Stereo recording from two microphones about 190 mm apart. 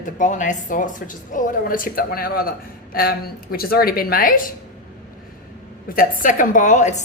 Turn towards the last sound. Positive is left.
turn(degrees=40)  # may be behind; listen again after turning